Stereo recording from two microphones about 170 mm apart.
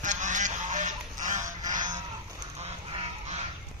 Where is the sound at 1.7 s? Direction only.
50° right (ahead or behind).